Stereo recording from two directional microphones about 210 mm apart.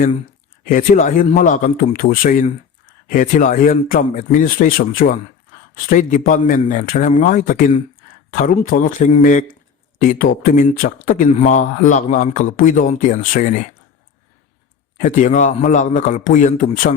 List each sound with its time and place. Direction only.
0.6 s speech: 40° left (ahead or behind)
14.9 s speech: 40° left (ahead or behind)